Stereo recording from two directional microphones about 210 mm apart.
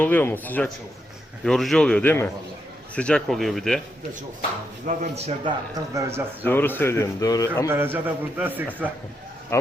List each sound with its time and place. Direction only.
0.0 s speech: 10° left (ahead or behind)
4.9 s speech: 30° right (ahead or behind)
5.7 s a man's voice: 15° right (ahead or behind)
6.4 s speech: 10° left (ahead or behind)
7.7 s a man's voice: 10° right (ahead or behind)
9.5 s speech: 15° left (ahead or behind)